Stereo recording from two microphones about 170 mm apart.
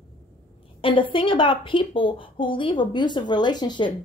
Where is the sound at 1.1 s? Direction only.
30° left (ahead or behind).